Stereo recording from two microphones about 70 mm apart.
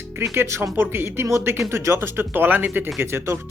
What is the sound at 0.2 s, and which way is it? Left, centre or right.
Speech, right.